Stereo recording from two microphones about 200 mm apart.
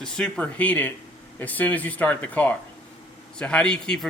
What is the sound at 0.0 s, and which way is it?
A man's voice, 5° left (ahead or behind).